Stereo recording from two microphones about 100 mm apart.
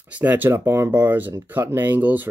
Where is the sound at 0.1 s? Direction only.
20° right (ahead or behind).